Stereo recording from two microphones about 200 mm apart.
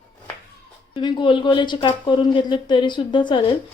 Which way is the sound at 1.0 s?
25° left (ahead or behind).